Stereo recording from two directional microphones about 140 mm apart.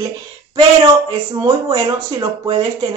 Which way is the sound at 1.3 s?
30° right (ahead or behind).